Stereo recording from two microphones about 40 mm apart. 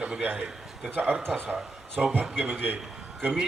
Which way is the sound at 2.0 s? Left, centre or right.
Centre.